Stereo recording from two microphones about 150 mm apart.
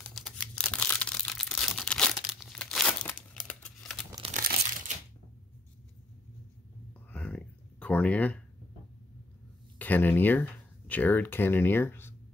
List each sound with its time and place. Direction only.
0.1 s tearing: 5° left (ahead or behind)
4.3 s crumpling: 65° right (ahead or behind)
7.1 s a sound: 10° left (ahead or behind)
9.8 s speech: 10° left (ahead or behind)